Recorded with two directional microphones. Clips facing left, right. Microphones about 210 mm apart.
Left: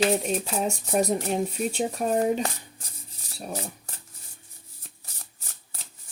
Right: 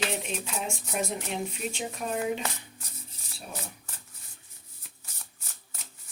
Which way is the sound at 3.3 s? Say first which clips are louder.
Left 7 dB; 40° left (ahead or behind).